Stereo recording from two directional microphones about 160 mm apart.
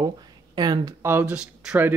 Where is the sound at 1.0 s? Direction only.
10° right (ahead or behind).